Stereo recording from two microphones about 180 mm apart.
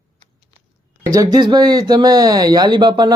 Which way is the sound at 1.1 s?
20° right (ahead or behind).